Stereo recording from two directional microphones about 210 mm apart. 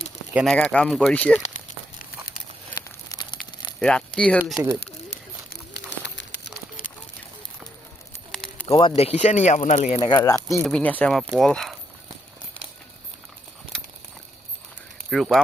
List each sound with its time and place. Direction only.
0.3 s speech: 5° left (ahead or behind)
1.4 s a sound: 40° left (ahead or behind)
2.7 s crumpling: 15° left (ahead or behind)
3.8 s speech: 5° left (ahead or behind)
5.5 s a sound: 55° left (ahead or behind)
8.3 s bird: 5° left (ahead or behind)
8.6 s speech: 25° left (ahead or behind)
10.2 s speech: 15° left (ahead or behind)
15.1 s speech: centre (ahead or behind)